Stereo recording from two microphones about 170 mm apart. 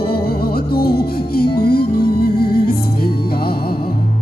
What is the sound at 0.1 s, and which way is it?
Music, 65° left (ahead or behind).